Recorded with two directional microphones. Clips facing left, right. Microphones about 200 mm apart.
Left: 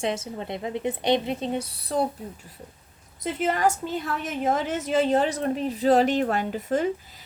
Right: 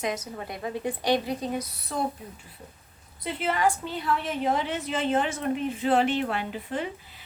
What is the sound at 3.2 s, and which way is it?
A woman's voice, 45° left (ahead or behind).